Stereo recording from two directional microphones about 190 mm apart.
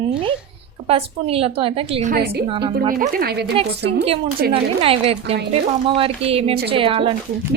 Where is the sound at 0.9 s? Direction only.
30° right (ahead or behind).